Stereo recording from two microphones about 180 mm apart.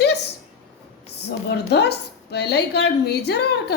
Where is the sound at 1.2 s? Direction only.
65° left (ahead or behind).